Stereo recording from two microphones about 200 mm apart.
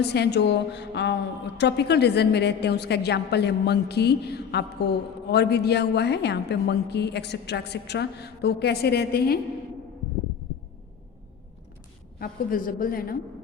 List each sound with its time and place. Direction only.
0.0 s a woman's voice: 55° left (ahead or behind)
12.2 s a woman's voice: 45° left (ahead or behind)